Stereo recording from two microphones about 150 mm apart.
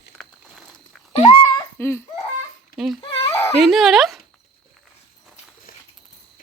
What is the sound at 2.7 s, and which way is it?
Speech, centre (ahead or behind).